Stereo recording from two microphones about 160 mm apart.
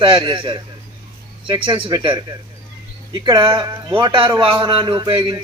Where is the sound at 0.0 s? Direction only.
30° right (ahead or behind).